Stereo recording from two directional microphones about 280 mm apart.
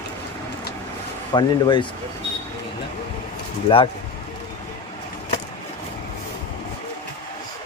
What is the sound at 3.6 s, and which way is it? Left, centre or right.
Speech, centre.